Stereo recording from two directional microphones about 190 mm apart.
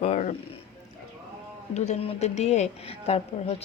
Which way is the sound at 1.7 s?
35° left (ahead or behind).